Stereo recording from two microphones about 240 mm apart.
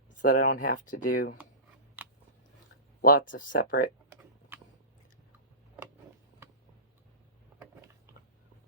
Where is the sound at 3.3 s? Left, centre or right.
Left.